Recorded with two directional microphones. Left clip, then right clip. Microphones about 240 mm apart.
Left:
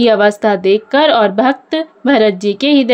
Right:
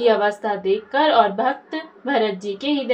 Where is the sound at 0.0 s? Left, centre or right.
Left.